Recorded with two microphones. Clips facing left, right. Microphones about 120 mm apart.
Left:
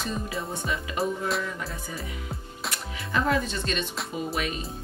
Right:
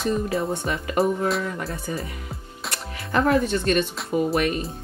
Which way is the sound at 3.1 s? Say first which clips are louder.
Right 6 dB; 55° right (ahead or behind).